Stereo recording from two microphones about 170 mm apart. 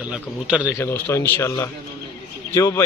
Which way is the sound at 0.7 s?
15° left (ahead or behind).